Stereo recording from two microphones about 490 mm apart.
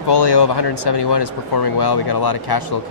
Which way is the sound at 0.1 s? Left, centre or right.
Left.